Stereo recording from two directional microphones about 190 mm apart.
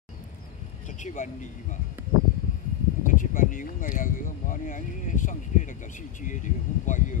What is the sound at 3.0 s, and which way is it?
Speech, 45° left (ahead or behind).